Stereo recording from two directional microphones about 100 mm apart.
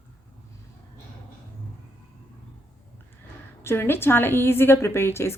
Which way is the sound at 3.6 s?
25° left (ahead or behind).